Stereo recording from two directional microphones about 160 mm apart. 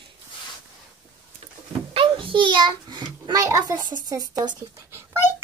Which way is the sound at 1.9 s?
35° right (ahead or behind).